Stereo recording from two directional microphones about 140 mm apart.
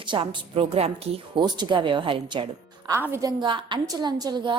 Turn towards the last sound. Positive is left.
turn(degrees=-30)  # may be behind; listen again after turning